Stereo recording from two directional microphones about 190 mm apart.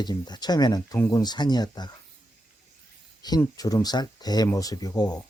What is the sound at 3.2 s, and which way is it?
Speech, 20° left (ahead or behind).